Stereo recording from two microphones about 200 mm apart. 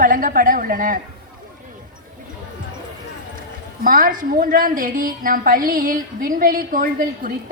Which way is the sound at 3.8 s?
45° right (ahead or behind).